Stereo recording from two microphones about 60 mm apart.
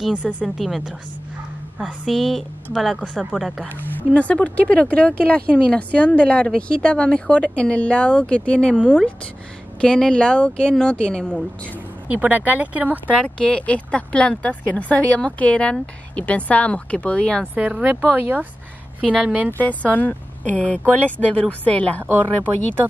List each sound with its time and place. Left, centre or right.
0.1 s speech: right
0.6 s a woman's voice: centre
2.0 s a woman's voice: centre
4.1 s a woman's voice: left
12.1 s speech: right
13.1 s a woman's voice: centre
17.6 s speech: right
19.6 s a woman's voice: left